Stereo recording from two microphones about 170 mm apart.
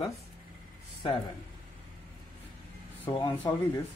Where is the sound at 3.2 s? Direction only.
25° left (ahead or behind).